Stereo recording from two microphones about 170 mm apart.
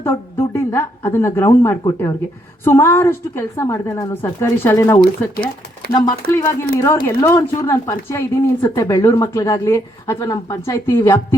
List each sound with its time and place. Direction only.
0.0 s speech: 15° left (ahead or behind)